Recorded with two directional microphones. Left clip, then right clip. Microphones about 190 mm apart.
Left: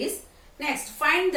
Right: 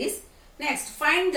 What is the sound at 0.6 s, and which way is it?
Speech, 20° right (ahead or behind).